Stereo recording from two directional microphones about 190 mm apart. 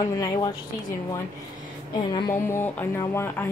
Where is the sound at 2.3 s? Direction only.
10° left (ahead or behind).